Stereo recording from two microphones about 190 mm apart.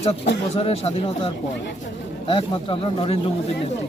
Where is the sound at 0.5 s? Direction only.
30° left (ahead or behind).